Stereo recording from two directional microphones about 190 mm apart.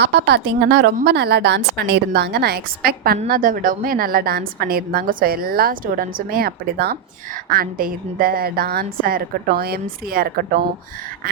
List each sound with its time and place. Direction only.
0.0 s a woman's voice: 60° right (ahead or behind)